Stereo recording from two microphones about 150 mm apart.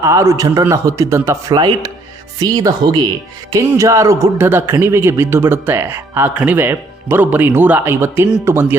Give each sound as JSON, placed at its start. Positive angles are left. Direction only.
{"t": 0.0, "sound": "a man's voice", "side_deg": -20}